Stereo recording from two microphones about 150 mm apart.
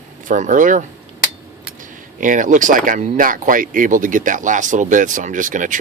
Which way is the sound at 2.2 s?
60° right (ahead or behind).